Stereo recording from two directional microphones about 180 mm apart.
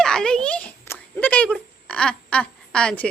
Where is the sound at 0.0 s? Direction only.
5° left (ahead or behind).